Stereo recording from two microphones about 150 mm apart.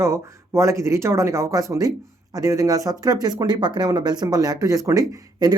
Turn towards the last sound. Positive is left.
turn(degrees=-25)  # may be behind; listen again after turning